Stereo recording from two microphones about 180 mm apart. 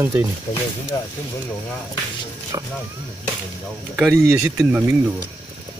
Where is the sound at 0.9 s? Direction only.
15° left (ahead or behind).